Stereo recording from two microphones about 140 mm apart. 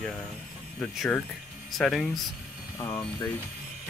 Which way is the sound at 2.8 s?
20° left (ahead or behind).